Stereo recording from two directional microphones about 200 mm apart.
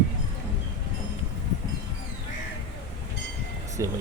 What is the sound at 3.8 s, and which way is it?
Music, 15° right (ahead or behind).